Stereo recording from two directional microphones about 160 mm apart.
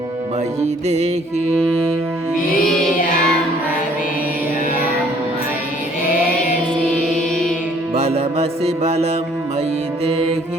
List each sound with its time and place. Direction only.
0.6 s music: 40° right (ahead or behind)
2.6 s music: 5° left (ahead or behind)
7.9 s music: 40° right (ahead or behind)
10.1 s music: 40° right (ahead or behind)